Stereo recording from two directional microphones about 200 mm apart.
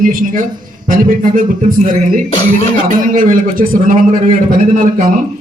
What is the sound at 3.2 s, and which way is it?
A man's voice, 45° right (ahead or behind).